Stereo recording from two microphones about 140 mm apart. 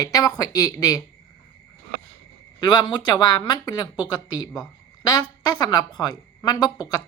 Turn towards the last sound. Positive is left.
turn(degrees=30)  # may be behind; listen again after turning